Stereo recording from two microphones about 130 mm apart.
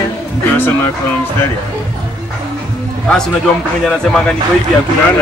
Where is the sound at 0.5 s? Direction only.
15° left (ahead or behind).